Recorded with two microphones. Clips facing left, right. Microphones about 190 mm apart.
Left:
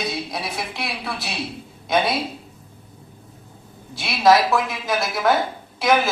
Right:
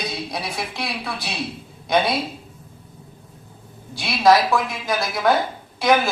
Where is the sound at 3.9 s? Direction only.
Centre (ahead or behind).